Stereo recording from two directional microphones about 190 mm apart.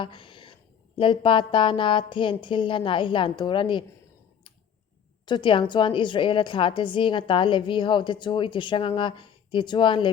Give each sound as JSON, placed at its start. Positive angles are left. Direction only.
{"t": 0.0, "sound": "a sound", "side_deg": 25}
{"t": 0.9, "sound": "a woman's voice", "side_deg": 25}
{"t": 5.2, "sound": "a woman's voice", "side_deg": 25}